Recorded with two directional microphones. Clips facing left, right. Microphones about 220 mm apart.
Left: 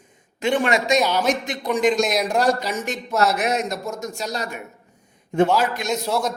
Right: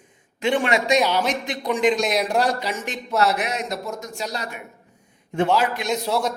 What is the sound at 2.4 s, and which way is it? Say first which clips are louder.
Speech: left 3 dB; 45° left (ahead or behind).